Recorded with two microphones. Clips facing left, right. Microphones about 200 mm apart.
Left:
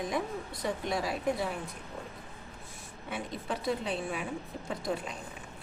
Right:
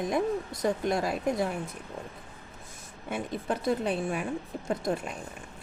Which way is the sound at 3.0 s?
50° right (ahead or behind).